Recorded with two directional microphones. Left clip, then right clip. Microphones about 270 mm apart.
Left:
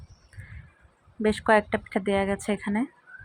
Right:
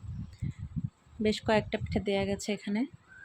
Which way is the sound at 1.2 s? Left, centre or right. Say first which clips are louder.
Left 7 dB; centre.